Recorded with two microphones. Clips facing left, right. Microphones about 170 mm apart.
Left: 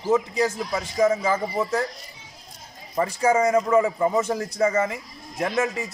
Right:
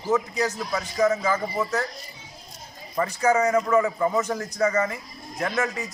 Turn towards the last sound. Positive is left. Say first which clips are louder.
# left 2 dB
turn(degrees=25)  # may be behind; listen again after turning